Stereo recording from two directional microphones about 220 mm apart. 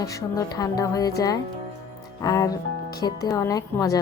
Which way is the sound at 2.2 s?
15° left (ahead or behind).